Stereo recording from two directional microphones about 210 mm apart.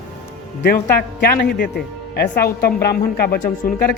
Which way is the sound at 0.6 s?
50° left (ahead or behind).